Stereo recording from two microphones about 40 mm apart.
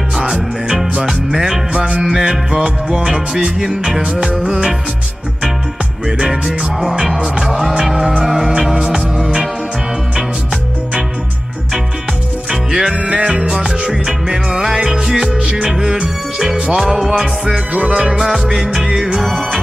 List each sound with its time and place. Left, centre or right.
0.1 s music: centre
6.0 s music: centre
12.4 s music: centre
12.9 s music: right; by 19.6 s centre